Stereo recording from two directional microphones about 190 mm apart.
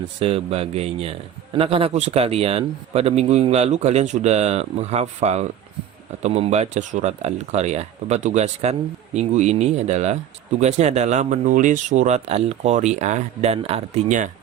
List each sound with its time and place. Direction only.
0.2 s a man's voice: 30° right (ahead or behind)